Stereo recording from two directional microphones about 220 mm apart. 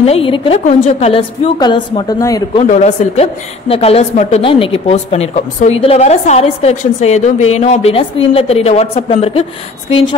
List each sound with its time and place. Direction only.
0.0 s a woman's voice: 25° left (ahead or behind)
2.6 s a woman's voice: 30° left (ahead or behind)